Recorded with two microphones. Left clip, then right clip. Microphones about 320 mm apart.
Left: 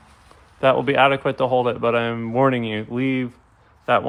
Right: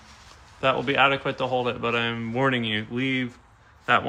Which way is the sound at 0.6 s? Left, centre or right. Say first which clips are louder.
Left 5 dB; left.